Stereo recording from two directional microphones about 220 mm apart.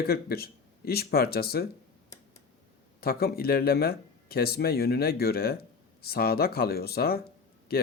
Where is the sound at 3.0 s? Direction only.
45° left (ahead or behind).